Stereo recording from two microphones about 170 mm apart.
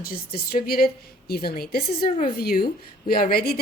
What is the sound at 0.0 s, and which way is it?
A woman's voice, 60° left (ahead or behind).